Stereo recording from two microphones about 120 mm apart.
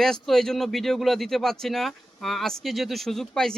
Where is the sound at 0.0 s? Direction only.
5° left (ahead or behind).